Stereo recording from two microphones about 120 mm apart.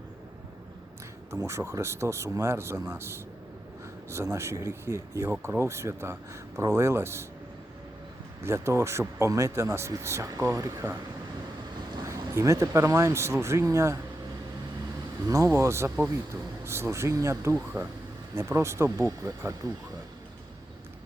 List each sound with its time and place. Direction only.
1.3 s speech: 25° right (ahead or behind)
8.4 s speech: 20° right (ahead or behind)
12.0 s speech: 25° right (ahead or behind)
15.3 s speech: 25° right (ahead or behind)